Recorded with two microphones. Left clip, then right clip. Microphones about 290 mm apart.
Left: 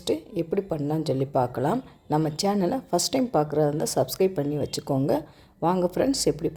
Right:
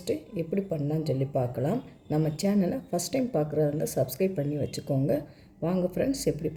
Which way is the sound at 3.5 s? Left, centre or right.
Left.